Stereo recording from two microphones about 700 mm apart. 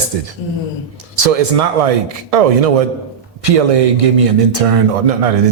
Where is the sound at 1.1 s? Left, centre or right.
Right.